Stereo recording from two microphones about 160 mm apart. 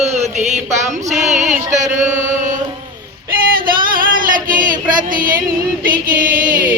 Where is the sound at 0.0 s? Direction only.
45° right (ahead or behind).